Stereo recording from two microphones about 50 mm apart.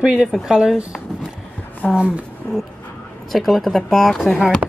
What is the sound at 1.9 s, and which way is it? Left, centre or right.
Speech, right.